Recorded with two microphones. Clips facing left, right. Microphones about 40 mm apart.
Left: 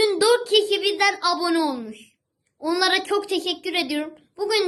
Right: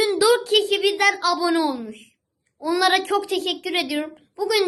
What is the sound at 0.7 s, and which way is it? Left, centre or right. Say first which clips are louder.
Speech: right 2 dB; centre.